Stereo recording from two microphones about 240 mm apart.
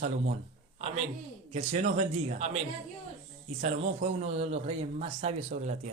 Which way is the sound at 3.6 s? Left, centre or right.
Right.